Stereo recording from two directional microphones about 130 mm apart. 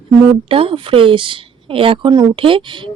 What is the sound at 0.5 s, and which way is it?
A woman's voice, 45° right (ahead or behind).